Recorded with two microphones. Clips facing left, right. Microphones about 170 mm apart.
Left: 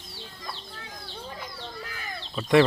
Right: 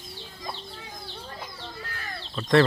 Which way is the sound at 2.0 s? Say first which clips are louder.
Even; 10° left (ahead or behind).